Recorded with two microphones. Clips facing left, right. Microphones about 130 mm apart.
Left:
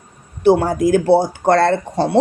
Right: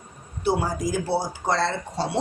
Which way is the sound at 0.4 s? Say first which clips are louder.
Left 11 dB; 65° left (ahead or behind).